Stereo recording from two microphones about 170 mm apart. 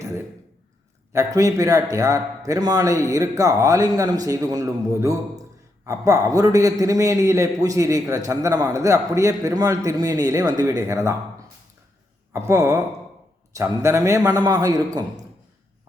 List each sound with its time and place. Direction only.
1.1 s a man's voice: 20° right (ahead or behind)
12.3 s a man's voice: 15° right (ahead or behind)